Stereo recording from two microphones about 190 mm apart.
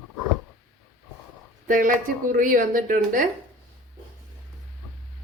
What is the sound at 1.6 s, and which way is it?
Speech, 45° right (ahead or behind).